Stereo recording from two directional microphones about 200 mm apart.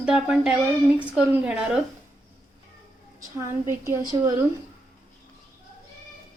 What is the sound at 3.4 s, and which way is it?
Speech, 15° right (ahead or behind).